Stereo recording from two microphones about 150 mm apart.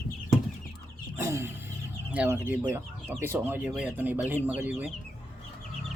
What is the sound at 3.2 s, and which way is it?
Speech, 15° right (ahead or behind).